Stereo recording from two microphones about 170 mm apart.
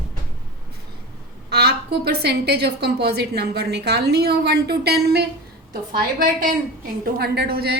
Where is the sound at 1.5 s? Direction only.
70° right (ahead or behind).